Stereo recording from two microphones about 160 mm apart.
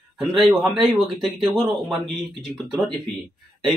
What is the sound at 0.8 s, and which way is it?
Speech, centre (ahead or behind).